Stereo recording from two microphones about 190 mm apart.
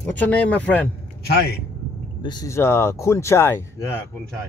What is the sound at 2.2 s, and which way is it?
Speech, 15° left (ahead or behind).